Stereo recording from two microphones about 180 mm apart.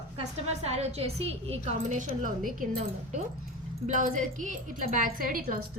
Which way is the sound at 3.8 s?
45° right (ahead or behind).